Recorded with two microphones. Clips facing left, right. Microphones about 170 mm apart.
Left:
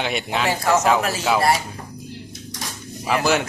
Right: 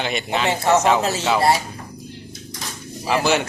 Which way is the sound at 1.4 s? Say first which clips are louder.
Right 2 dB; 25° right (ahead or behind).